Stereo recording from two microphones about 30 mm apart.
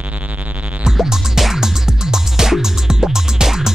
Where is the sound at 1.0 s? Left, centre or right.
Centre.